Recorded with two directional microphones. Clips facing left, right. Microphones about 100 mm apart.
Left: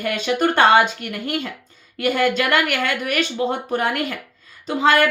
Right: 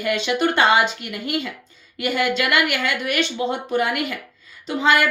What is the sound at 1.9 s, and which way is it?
Speech, 45° left (ahead or behind).